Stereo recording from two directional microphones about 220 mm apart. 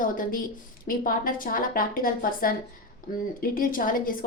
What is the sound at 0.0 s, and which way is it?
A woman's voice, 40° left (ahead or behind).